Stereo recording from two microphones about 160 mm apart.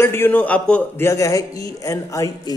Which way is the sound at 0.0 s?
15° left (ahead or behind).